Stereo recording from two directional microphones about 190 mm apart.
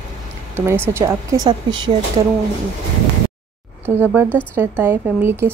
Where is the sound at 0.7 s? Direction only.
15° right (ahead or behind).